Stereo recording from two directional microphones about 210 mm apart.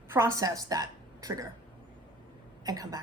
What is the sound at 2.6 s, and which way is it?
Speech, 15° right (ahead or behind).